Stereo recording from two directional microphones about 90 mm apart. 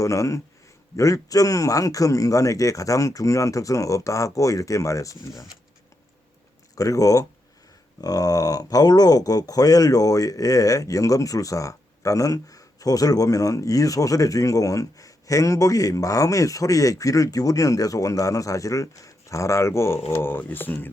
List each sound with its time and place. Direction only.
0.0 s speech: 35° left (ahead or behind)
6.7 s speech: 40° left (ahead or behind); by 20.9 s 25° left (ahead or behind)